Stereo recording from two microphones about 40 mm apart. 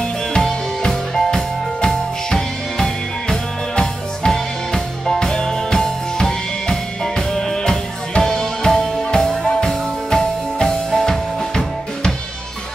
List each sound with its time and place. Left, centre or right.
0.3 s music: centre